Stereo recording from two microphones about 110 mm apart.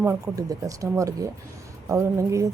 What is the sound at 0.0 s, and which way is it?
A woman's voice, 25° right (ahead or behind).